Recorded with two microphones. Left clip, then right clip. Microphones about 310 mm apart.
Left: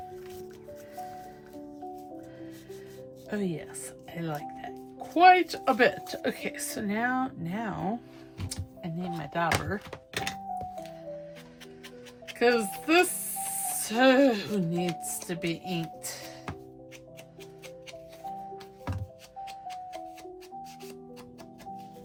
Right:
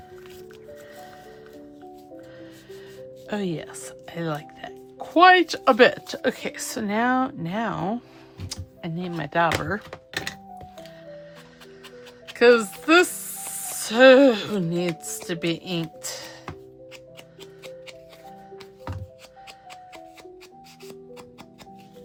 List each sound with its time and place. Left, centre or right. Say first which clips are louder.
3.2 s a woman's voice: right 5 dB; centre
9.9 s thunk: right 2 dB; centre
12.3 s speech: right 8 dB; centre